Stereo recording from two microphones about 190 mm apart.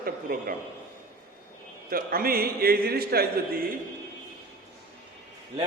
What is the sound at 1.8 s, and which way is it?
A man's voice, 50° right (ahead or behind).